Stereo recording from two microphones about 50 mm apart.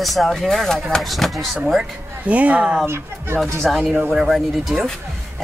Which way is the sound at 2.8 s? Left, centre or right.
Right.